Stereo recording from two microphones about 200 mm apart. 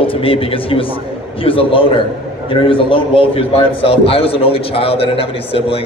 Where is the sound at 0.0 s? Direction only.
25° left (ahead or behind).